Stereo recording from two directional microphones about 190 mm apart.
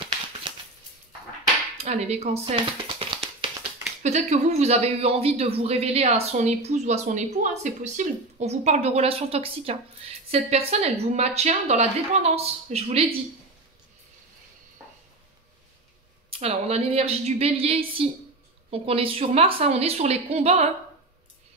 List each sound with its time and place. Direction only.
1.8 s a sound: 35° right (ahead or behind)
4.0 s speech: 35° right (ahead or behind)
16.3 s speech: 35° right (ahead or behind)